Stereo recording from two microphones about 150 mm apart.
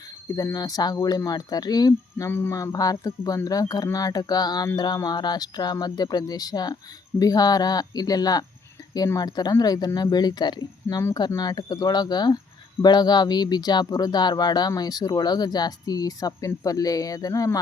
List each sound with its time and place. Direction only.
0.3 s speech: 25° left (ahead or behind)